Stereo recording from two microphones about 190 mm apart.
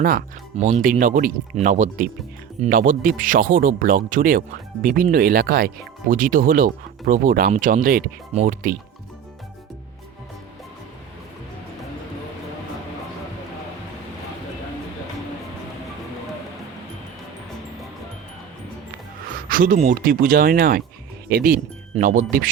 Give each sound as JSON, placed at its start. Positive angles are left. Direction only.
{"t": 0.5, "sound": "speech", "side_deg": -35}
{"t": 0.8, "sound": "speech", "side_deg": -45}
{"t": 19.5, "sound": "speech", "side_deg": -45}